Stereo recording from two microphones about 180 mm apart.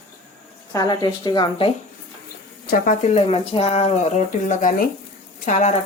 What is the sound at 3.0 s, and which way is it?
Speech, 35° left (ahead or behind).